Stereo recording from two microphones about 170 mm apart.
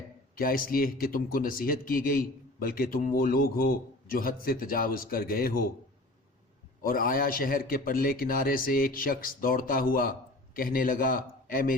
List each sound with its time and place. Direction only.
0.3 s speech: 60° left (ahead or behind)
6.8 s speech: 55° left (ahead or behind)